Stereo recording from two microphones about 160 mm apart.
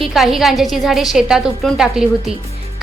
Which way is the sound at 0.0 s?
Centre (ahead or behind).